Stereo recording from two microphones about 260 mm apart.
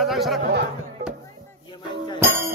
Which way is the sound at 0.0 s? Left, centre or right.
Centre.